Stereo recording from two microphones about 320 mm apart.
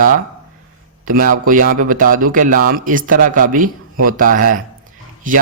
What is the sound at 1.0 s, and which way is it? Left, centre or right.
A man's voice, right.